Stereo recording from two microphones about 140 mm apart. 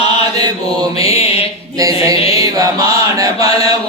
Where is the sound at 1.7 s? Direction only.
25° right (ahead or behind).